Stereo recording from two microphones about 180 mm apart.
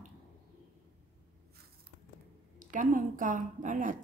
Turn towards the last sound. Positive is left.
turn(degrees=-50)  # may be behind; listen again after turning